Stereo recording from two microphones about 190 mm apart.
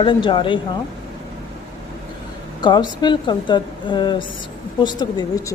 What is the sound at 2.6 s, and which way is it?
A woman's voice, 20° left (ahead or behind).